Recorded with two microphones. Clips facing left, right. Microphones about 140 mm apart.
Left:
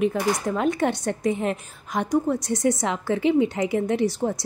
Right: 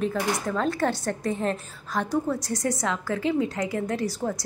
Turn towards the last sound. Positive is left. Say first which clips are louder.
# left 5 dB
turn(degrees=25)  # may be behind; listen again after turning